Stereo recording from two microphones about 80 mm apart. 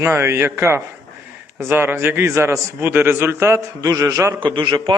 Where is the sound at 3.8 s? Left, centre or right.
Right.